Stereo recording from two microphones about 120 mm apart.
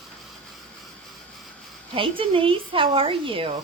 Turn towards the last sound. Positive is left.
turn(degrees=-45)  # may be behind; listen again after turning